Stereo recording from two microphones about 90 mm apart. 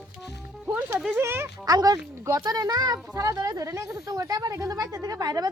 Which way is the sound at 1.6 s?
45° right (ahead or behind).